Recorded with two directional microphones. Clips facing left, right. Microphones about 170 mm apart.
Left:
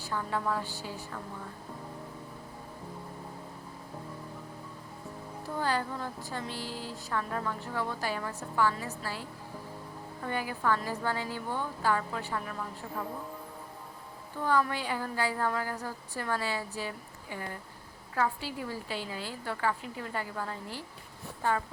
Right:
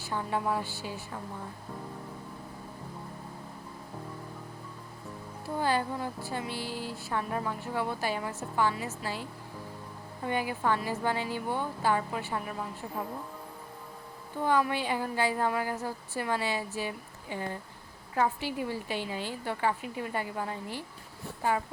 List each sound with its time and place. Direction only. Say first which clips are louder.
0.1 s a woman's voice: right 2 dB; 20° right (ahead or behind)
5.5 s a woman's voice: right 3 dB; 15° right (ahead or behind)
10.2 s a woman's voice: right 2 dB; 15° right (ahead or behind)
14.4 s a woman's voice: right 2 dB; 15° right (ahead or behind)